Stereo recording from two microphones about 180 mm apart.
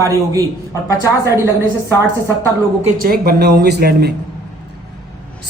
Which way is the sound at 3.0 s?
55° right (ahead or behind).